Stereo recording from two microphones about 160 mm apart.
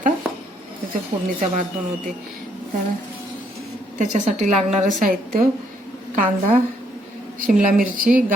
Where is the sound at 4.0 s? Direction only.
50° right (ahead or behind).